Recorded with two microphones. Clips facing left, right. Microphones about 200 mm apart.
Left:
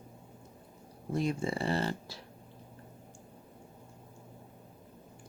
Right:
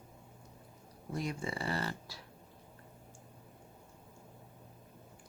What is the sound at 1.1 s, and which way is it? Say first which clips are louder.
Speech: left 6 dB; 25° left (ahead or behind).